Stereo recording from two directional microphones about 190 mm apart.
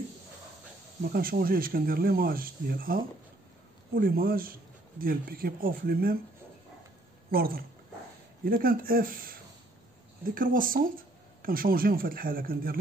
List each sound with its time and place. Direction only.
1.1 s speech: 50° right (ahead or behind)
7.2 s speech: 50° right (ahead or behind)